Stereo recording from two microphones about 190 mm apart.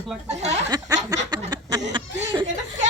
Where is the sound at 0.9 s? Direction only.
15° right (ahead or behind).